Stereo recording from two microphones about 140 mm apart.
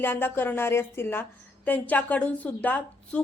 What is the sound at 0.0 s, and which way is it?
A woman's voice, 15° left (ahead or behind).